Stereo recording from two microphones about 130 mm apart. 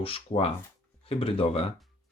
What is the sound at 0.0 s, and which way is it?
Speech, 45° left (ahead or behind).